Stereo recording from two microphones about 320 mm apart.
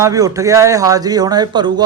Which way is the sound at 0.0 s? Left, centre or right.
Centre.